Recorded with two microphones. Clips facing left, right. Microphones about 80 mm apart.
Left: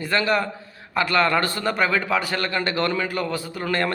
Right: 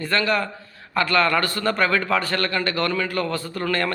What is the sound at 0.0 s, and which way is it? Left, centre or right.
A man's voice, centre.